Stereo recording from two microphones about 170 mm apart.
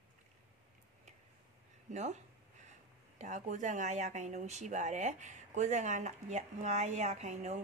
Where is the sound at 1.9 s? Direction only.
40° right (ahead or behind).